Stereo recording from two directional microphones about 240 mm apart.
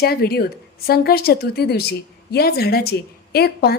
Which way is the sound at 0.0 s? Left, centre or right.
Left.